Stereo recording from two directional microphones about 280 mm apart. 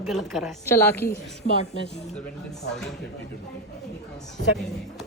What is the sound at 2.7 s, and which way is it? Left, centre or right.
Speech, centre.